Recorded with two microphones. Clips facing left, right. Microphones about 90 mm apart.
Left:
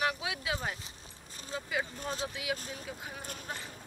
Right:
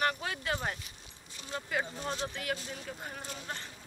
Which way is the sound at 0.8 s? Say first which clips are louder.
Left 2 dB; 40° left (ahead or behind).